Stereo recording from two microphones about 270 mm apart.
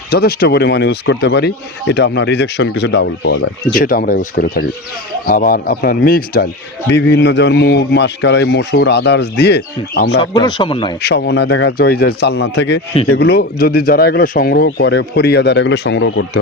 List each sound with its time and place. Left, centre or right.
0.1 s speech: left
10.2 s speech: centre
11.0 s speech: left